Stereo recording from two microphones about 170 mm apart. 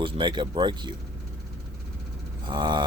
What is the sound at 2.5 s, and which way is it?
Speech, 25° right (ahead or behind).